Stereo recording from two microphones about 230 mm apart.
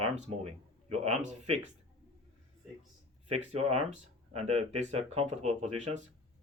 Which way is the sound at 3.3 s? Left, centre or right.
Right.